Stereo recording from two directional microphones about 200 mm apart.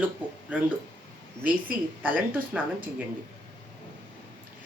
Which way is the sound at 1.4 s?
45° right (ahead or behind).